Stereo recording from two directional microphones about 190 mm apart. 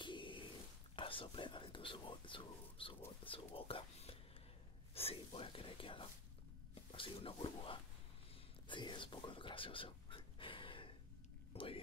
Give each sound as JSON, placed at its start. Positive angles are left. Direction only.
{"t": 0.0, "sound": "a sound", "side_deg": 25}
{"t": 0.9, "sound": "speech", "side_deg": 30}
{"t": 8.6, "sound": "whispering", "side_deg": 25}